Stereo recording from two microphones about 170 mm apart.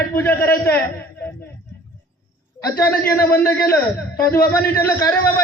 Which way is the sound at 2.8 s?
10° left (ahead or behind).